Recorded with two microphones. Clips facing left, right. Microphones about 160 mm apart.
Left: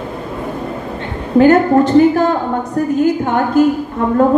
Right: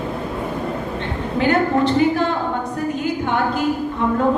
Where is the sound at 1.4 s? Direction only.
45° left (ahead or behind).